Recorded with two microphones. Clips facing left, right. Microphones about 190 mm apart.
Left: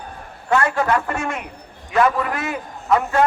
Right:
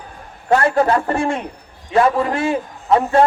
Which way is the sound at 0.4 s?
35° right (ahead or behind).